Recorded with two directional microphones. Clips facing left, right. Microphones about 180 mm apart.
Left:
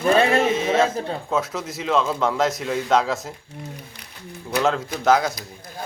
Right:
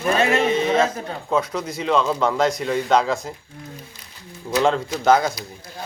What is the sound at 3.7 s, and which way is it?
Speech, 65° left (ahead or behind).